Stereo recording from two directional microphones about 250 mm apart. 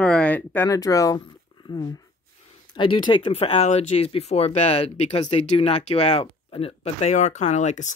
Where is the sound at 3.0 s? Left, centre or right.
Centre.